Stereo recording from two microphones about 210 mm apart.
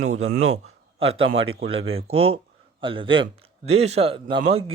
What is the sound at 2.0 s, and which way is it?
A man's voice, 30° right (ahead or behind).